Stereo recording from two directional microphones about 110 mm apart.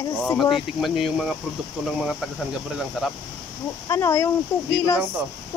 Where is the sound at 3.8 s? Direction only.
25° left (ahead or behind).